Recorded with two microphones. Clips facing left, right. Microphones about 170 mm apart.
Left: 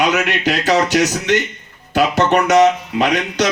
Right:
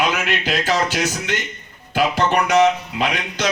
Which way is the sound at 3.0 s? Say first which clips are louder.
Left 6 dB; 75° left (ahead or behind).